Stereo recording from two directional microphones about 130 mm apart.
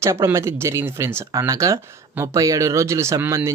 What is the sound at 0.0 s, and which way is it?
Speech, 20° right (ahead or behind).